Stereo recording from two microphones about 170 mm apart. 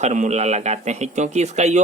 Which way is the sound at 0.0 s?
40° right (ahead or behind).